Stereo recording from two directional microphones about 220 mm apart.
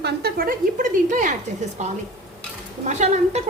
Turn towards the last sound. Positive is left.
turn(degrees=-30)  # may be behind; listen again after turning